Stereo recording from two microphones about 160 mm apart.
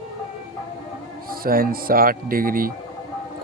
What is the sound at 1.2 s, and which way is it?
Speech, 65° right (ahead or behind).